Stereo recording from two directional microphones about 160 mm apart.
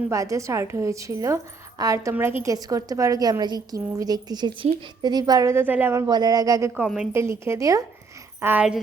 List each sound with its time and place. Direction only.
0.1 s a woman's voice: 20° right (ahead or behind)
6.8 s a woman's voice: 5° right (ahead or behind)
7.1 s a woman's voice: 15° right (ahead or behind)